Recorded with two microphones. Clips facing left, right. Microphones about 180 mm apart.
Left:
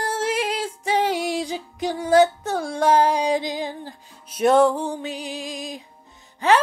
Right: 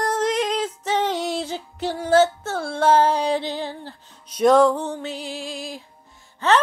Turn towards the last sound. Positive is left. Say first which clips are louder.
# left 1 dB
turn(degrees=15)  # may be behind; listen again after turning